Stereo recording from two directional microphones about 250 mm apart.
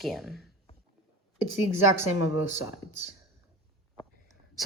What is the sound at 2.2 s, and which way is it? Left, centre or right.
Speech, left.